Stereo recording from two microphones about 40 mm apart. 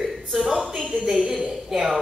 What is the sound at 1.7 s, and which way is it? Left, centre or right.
Music, centre.